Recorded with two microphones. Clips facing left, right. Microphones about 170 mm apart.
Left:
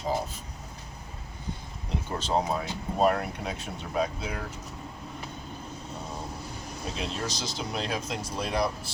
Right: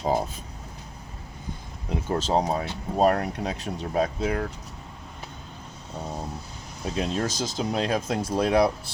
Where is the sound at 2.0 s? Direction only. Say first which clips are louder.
Right 4 dB; 40° right (ahead or behind).